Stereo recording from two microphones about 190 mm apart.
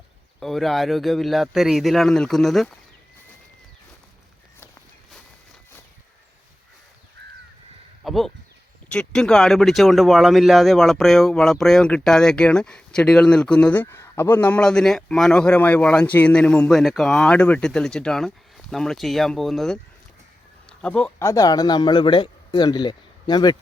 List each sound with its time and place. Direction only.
0.3 s speech: centre (ahead or behind)
8.0 s a sound: centre (ahead or behind)
8.9 s speech: 5° left (ahead or behind); by 23.6 s 20° left (ahead or behind)